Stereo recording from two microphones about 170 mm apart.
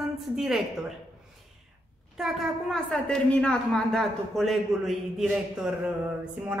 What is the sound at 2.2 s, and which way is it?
A woman's voice, centre (ahead or behind).